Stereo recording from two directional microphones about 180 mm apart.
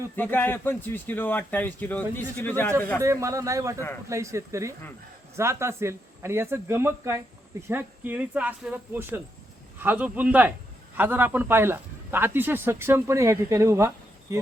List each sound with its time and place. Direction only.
0.2 s speech: 10° left (ahead or behind)
3.0 s a man's voice: 15° right (ahead or behind)